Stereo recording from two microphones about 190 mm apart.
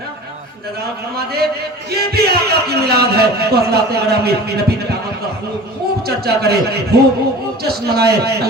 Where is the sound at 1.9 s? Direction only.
55° right (ahead or behind).